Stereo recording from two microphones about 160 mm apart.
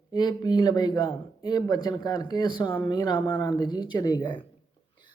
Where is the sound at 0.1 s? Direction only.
25° left (ahead or behind).